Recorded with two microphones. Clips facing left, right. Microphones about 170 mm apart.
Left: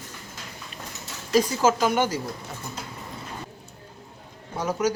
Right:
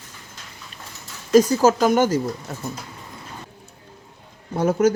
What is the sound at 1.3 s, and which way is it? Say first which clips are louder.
Speech: right 6 dB; 45° right (ahead or behind).